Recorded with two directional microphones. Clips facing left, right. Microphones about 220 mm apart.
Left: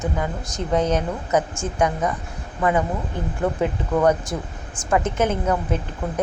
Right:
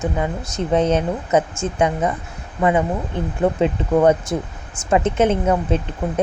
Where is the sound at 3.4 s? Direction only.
20° right (ahead or behind).